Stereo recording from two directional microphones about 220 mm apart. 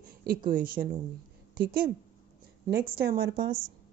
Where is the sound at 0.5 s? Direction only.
40° right (ahead or behind).